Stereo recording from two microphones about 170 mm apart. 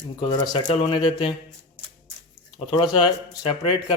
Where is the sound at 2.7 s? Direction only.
30° left (ahead or behind).